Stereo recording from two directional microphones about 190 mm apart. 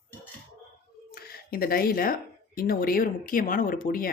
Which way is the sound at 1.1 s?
55° left (ahead or behind).